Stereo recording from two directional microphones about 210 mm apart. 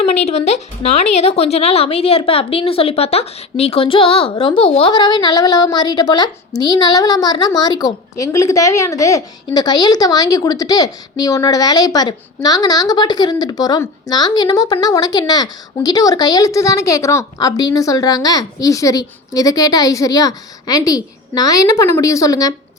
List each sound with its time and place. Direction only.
0.0 s a woman's voice: 30° left (ahead or behind)